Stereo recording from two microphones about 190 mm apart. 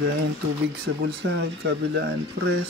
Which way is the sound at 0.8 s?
65° right (ahead or behind).